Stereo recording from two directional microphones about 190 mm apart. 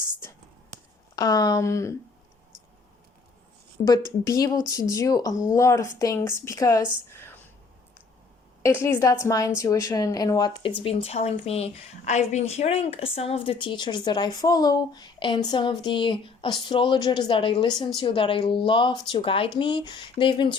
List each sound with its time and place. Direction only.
1.1 s speech: 20° left (ahead or behind)
3.8 s a woman's voice: 20° left (ahead or behind)
8.6 s a woman's voice: 10° left (ahead or behind)